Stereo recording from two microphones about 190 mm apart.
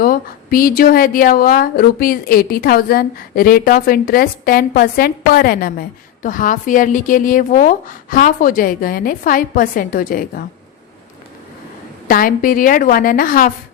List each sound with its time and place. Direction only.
0.0 s speech: 50° left (ahead or behind)
12.0 s speech: 50° left (ahead or behind)